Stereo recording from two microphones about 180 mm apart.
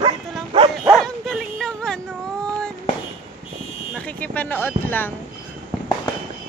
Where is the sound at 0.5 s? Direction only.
30° right (ahead or behind).